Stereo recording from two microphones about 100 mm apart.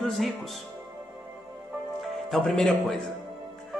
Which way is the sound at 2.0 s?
Centre (ahead or behind).